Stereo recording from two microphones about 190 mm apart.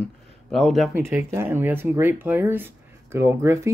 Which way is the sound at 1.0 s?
10° right (ahead or behind).